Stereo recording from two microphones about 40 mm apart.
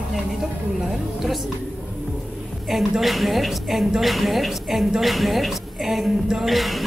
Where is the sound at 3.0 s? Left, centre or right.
Centre.